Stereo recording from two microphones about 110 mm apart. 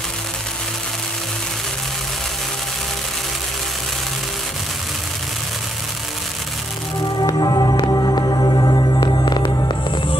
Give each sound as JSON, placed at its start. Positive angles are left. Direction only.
{"t": 7.2, "sound": "music", "side_deg": 40}